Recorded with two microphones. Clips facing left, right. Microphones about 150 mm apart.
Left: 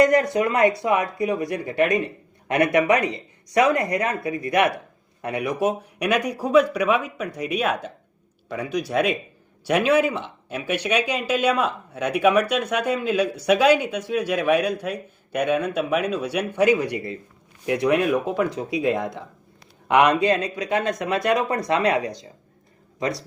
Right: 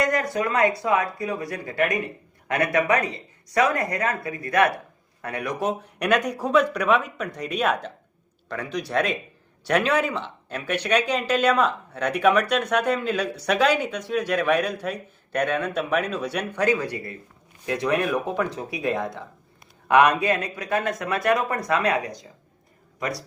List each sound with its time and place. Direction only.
0.0 s speech: 25° left (ahead or behind); by 16.6 s 5° left (ahead or behind)
16.6 s speech: 15° left (ahead or behind)